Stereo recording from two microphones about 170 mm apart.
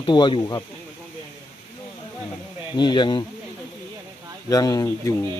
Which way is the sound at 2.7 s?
25° left (ahead or behind).